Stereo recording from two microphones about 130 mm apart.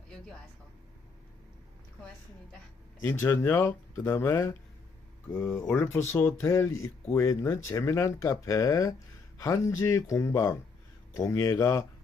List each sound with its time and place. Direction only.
3.0 s speech: 20° left (ahead or behind)